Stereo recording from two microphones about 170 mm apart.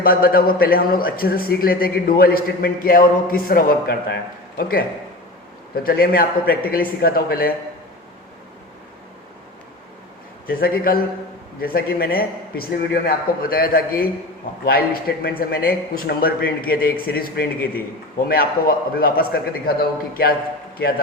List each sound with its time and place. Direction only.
0.0 s a man's voice: 60° left (ahead or behind)
5.8 s a man's voice: 60° left (ahead or behind)
10.5 s a man's voice: 60° left (ahead or behind)